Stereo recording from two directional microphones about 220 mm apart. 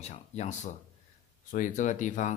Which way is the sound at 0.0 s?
30° left (ahead or behind).